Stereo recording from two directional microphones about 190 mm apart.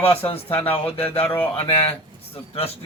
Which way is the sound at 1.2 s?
10° left (ahead or behind).